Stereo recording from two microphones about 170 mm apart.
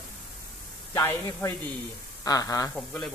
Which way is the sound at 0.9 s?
15° left (ahead or behind).